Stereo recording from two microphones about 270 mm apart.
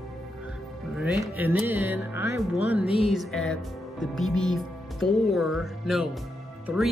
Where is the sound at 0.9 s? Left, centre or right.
Centre.